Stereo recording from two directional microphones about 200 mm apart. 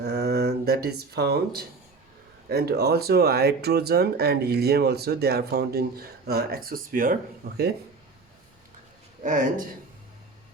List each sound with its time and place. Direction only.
0.0 s speech: 55° right (ahead or behind)
9.2 s speech: 40° right (ahead or behind)